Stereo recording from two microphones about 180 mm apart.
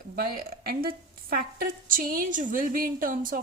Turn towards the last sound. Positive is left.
turn(degrees=-50)  # may be behind; listen again after turning